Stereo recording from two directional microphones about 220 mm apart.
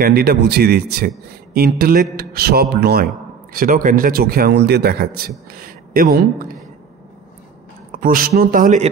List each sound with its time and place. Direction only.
0.0 s a man's voice: 45° right (ahead or behind)
7.9 s speech: 40° right (ahead or behind)